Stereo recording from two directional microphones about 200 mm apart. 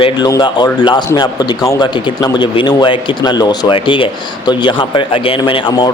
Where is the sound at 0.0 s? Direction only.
20° left (ahead or behind).